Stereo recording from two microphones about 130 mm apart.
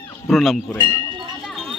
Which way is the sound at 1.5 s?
Centre (ahead or behind).